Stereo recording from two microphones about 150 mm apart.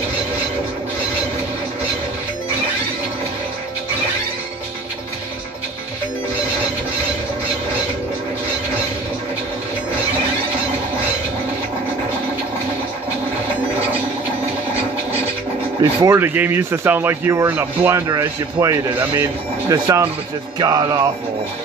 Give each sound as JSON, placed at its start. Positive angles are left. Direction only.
{"t": 15.8, "sound": "speech", "side_deg": -20}